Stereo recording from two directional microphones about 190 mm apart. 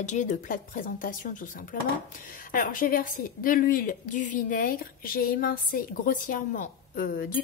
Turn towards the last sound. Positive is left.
turn(degrees=50)  # may be behind; listen again after turning